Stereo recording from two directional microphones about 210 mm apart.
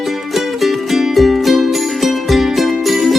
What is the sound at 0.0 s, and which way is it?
Music, centre (ahead or behind).